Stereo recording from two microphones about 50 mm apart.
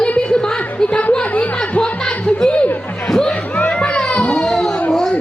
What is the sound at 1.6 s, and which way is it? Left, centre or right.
Music, left.